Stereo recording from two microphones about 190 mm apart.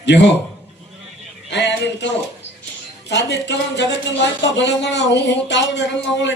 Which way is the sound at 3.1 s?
65° left (ahead or behind).